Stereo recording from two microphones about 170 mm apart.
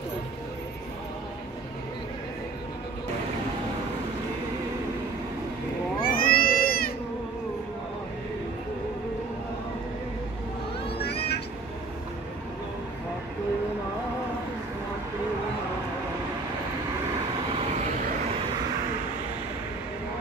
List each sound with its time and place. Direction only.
6.0 s baby cry: 55° left (ahead or behind)
11.0 s vehicle: 70° left (ahead or behind)